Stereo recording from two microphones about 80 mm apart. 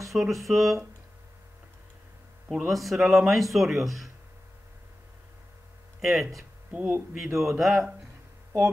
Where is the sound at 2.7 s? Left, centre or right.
Centre.